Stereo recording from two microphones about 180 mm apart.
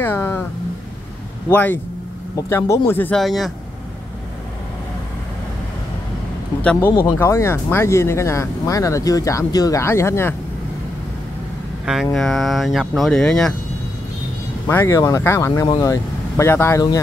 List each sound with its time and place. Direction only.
0.0 s vehicle: 15° left (ahead or behind)
1.5 s speech: 10° left (ahead or behind)
6.6 s speech: 5° left (ahead or behind)
11.8 s speech: 5° right (ahead or behind)
14.7 s speech: 15° left (ahead or behind)